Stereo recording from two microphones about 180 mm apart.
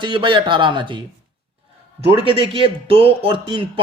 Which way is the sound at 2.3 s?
30° right (ahead or behind).